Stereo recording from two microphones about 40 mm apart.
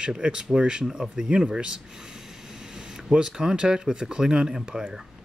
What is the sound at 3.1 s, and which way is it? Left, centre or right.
Speech, centre.